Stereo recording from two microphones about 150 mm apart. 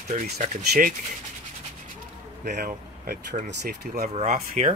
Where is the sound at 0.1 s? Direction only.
60° right (ahead or behind).